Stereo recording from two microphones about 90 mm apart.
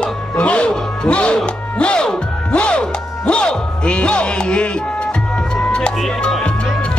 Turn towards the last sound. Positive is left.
turn(degrees=5)  # may be behind; listen again after turning